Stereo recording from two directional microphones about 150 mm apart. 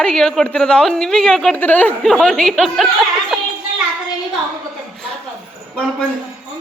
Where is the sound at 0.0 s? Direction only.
5° left (ahead or behind).